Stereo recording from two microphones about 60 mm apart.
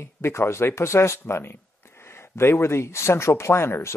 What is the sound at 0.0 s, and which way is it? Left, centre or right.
Speech, left.